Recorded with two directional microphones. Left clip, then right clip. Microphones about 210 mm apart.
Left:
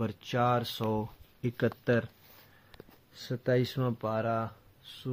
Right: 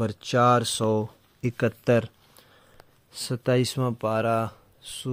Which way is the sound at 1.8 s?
30° right (ahead or behind).